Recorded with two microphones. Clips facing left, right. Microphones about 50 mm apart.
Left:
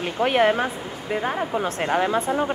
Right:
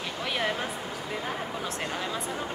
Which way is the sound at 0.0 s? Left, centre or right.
Left.